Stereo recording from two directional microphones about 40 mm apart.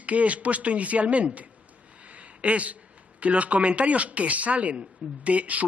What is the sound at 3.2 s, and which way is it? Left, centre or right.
A man's voice, right.